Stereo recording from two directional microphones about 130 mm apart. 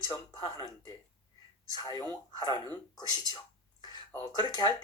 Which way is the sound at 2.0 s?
30° left (ahead or behind).